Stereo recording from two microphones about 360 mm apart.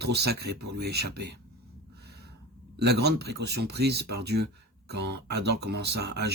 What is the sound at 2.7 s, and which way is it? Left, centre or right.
A man's voice, right.